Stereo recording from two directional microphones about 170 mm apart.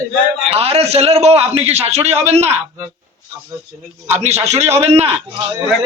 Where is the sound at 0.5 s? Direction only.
35° right (ahead or behind).